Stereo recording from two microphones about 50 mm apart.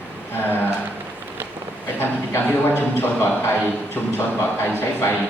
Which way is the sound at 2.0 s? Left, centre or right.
Left.